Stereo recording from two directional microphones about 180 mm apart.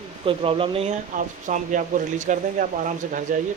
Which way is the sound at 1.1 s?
45° right (ahead or behind).